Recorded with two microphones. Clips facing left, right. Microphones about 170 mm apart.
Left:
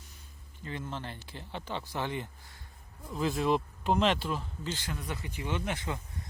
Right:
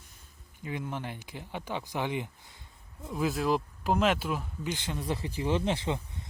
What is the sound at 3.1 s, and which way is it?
Speech, 5° right (ahead or behind).